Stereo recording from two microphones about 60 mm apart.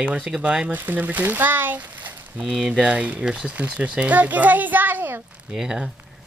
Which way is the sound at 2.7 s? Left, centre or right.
Centre.